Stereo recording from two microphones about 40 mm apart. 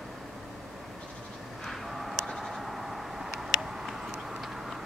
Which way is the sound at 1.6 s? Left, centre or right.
Centre.